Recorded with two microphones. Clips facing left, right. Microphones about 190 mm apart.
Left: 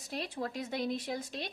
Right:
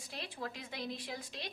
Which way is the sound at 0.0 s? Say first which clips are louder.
Left 6 dB; 40° left (ahead or behind).